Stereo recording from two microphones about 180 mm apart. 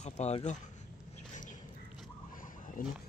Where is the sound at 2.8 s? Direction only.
55° left (ahead or behind).